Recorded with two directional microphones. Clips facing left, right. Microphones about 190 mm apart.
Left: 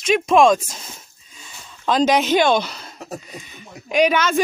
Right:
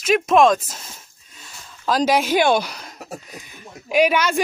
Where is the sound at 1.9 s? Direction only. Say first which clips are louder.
Left 2 dB; 5° right (ahead or behind).